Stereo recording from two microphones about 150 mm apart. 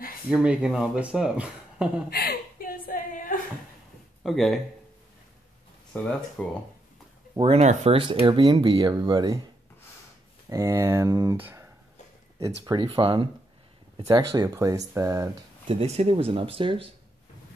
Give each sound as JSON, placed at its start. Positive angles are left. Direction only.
{"t": 0.3, "sound": "speech", "side_deg": -5}
{"t": 2.0, "sound": "a sound", "side_deg": 90}
{"t": 4.2, "sound": "speech", "side_deg": 0}
{"t": 5.9, "sound": "speech", "side_deg": 10}
{"t": 7.3, "sound": "speech", "side_deg": -35}
{"t": 7.6, "sound": "speech", "side_deg": -50}
{"t": 8.0, "sound": "speech", "side_deg": -35}
{"t": 10.5, "sound": "speech", "side_deg": -20}
{"t": 11.3, "sound": "speech", "side_deg": -15}
{"t": 12.4, "sound": "speech", "side_deg": -25}
{"t": 12.8, "sound": "speech", "side_deg": -35}
{"t": 14.0, "sound": "speech", "side_deg": -25}
{"t": 15.6, "sound": "speech", "side_deg": -45}